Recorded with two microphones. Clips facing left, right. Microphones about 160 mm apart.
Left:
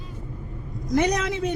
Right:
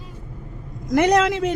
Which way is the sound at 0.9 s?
90° right.